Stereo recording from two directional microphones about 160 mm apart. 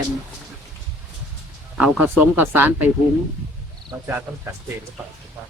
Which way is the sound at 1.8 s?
10° right (ahead or behind).